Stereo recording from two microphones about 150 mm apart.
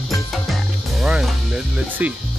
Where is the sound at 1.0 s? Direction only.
5° right (ahead or behind).